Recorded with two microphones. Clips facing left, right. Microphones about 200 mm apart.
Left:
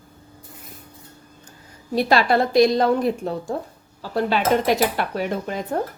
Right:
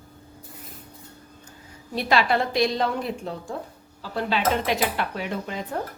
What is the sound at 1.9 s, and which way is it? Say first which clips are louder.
A woman's voice: left 4 dB; 40° left (ahead or behind).